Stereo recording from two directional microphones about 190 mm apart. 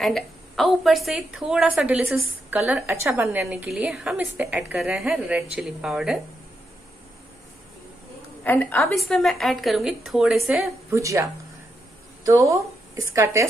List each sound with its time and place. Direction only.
0.0 s a woman's voice: centre (ahead or behind)
8.5 s a woman's voice: 10° left (ahead or behind)
10.9 s a woman's voice: 15° right (ahead or behind)
12.3 s a woman's voice: 15° right (ahead or behind)